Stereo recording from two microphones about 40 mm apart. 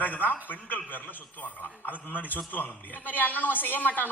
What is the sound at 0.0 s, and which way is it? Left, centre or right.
A woman's voice, left.